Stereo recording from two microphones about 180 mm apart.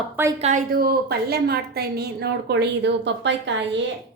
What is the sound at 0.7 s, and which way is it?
A woman's voice, 55° right (ahead or behind).